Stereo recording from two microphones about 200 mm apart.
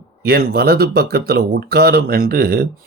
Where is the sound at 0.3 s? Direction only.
50° right (ahead or behind).